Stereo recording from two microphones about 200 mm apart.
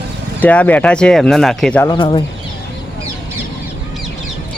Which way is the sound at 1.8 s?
25° left (ahead or behind).